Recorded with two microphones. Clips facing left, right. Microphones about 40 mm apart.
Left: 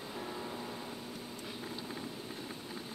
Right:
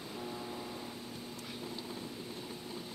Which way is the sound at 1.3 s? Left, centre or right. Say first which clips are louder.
Left 1 dB; centre.